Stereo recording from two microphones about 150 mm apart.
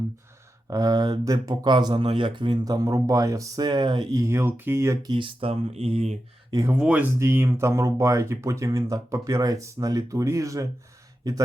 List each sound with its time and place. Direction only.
0.7 s speech: 25° right (ahead or behind)
5.1 s speech: 35° right (ahead or behind)
6.5 s speech: 25° right (ahead or behind)
6.7 s speech: 10° right (ahead or behind); by 11.4 s 25° right (ahead or behind)